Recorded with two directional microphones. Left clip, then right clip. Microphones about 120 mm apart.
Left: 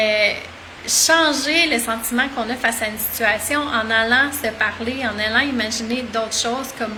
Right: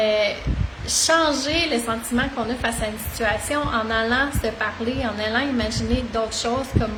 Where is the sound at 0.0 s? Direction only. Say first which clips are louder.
Left 3 dB; 25° right (ahead or behind).